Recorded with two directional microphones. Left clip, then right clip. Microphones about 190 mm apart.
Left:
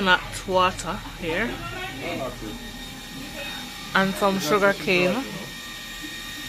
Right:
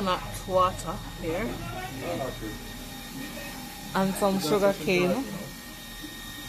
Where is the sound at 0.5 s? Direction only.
10° left (ahead or behind).